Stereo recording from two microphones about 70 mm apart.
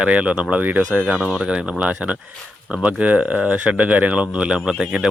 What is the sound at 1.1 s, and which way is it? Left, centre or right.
Speech, centre.